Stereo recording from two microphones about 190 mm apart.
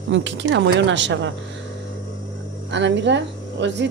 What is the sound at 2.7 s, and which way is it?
A woman's voice, 70° right (ahead or behind).